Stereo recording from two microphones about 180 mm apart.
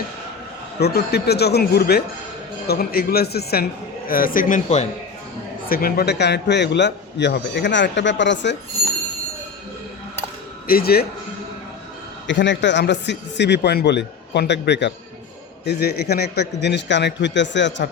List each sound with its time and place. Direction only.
0.8 s a man's voice: 65° left (ahead or behind); by 4.9 s 45° left (ahead or behind)
5.6 s a man's voice: 55° left (ahead or behind); by 8.5 s 80° left
10.7 s a man's voice: 55° left (ahead or behind)
12.3 s a man's voice: 90° left